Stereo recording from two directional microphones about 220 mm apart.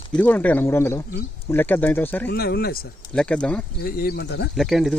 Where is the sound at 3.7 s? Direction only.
45° left (ahead or behind).